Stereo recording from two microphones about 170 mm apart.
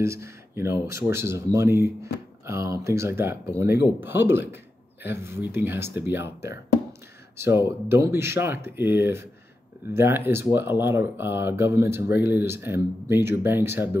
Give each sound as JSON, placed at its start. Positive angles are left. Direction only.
{"t": 0.0, "sound": "speech", "side_deg": -15}